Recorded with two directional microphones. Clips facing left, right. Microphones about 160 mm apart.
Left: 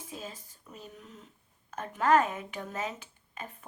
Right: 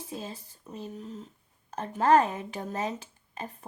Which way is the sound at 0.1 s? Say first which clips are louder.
Right 3 dB; 30° right (ahead or behind).